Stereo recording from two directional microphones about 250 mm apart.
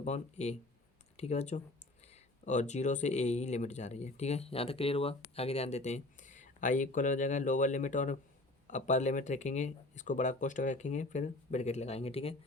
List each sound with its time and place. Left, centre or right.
0.0 s speech: left